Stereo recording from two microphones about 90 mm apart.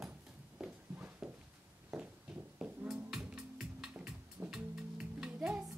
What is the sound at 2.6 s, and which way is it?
Music, 5° right (ahead or behind).